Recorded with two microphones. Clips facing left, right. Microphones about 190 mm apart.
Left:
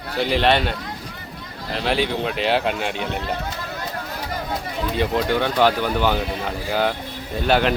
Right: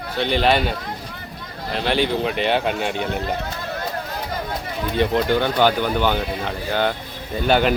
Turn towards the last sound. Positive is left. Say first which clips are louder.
# right 1 dB
turn(degrees=0)  # may be behind; listen again after turning